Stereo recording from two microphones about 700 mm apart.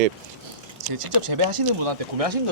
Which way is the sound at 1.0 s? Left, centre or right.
Right.